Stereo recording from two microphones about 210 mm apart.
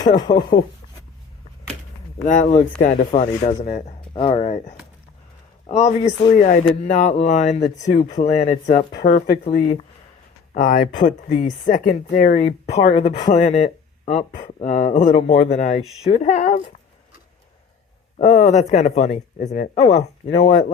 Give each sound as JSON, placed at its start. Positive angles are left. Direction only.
{"t": 0.3, "sound": "speech", "side_deg": 40}
{"t": 2.2, "sound": "speech", "side_deg": 35}
{"t": 9.0, "sound": "speech", "side_deg": 45}
{"t": 18.2, "sound": "speech", "side_deg": 35}